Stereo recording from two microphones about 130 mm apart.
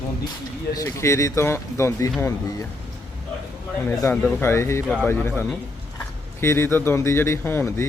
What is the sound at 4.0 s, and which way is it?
Speech, 20° left (ahead or behind).